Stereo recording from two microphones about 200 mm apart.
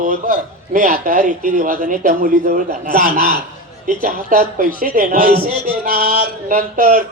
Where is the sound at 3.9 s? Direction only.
40° right (ahead or behind).